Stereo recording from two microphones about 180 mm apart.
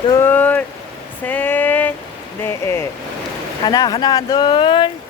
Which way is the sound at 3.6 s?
20° left (ahead or behind).